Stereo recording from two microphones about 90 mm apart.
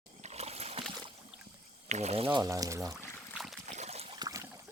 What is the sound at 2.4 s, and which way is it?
Speech, 40° right (ahead or behind).